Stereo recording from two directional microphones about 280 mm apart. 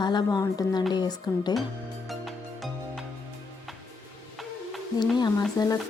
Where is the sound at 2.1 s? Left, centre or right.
Centre.